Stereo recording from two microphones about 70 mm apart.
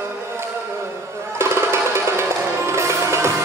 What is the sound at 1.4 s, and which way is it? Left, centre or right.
Music, right.